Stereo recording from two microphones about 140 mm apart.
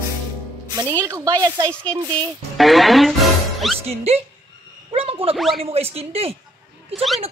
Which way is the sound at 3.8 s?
45° right (ahead or behind).